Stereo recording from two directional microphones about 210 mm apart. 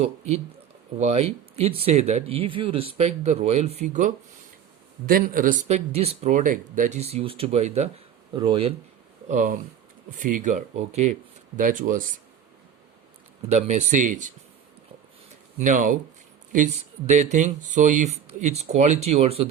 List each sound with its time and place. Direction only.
0.0 s speech: 30° right (ahead or behind)
9.3 s speech: 35° right (ahead or behind)
13.5 s speech: 30° right (ahead or behind)
15.5 s speech: 40° right (ahead or behind)